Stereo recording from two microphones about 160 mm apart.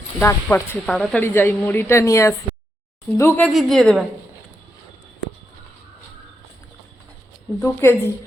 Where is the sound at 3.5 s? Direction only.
5° left (ahead or behind).